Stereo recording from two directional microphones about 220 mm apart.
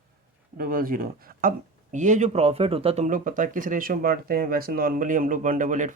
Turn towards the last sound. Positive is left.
turn(degrees=-35)  # may be behind; listen again after turning